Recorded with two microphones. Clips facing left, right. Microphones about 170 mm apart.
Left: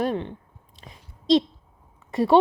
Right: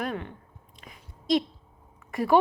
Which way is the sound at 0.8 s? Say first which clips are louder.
Left 2 dB; 30° left (ahead or behind).